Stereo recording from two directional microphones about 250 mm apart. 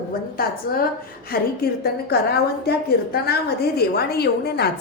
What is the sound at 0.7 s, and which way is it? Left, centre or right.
A woman's voice, left.